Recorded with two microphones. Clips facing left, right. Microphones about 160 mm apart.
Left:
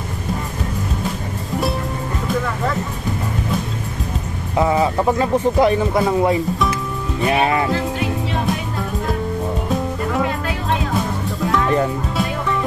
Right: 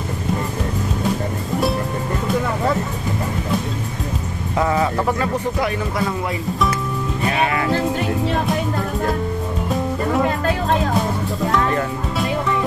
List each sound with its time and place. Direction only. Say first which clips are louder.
4.6 s speech: left 2 dB; 20° left (ahead or behind)
7.3 s speech: left 3 dB; 30° left (ahead or behind)